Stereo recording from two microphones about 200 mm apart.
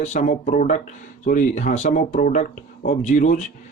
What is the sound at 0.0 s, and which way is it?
A man's voice, 35° left (ahead or behind).